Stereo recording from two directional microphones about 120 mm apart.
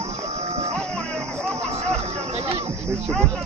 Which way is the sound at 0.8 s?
10° left (ahead or behind).